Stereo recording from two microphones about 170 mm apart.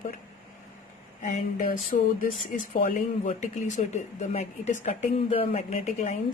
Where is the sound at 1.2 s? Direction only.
50° left (ahead or behind).